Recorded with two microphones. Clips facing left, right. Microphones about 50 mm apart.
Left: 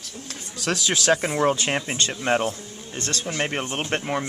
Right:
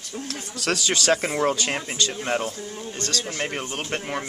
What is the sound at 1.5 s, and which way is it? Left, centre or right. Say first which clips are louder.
Speech: left 1 dB; left.